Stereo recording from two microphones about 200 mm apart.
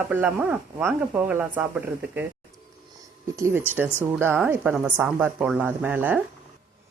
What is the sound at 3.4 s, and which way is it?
Speech, 10° right (ahead or behind).